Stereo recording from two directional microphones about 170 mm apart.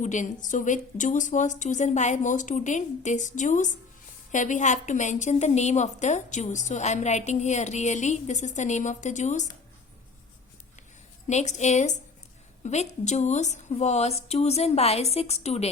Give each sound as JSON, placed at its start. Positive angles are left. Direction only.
{"t": 0.0, "sound": "a woman's voice", "side_deg": 45}
{"t": 11.3, "sound": "a woman's voice", "side_deg": 40}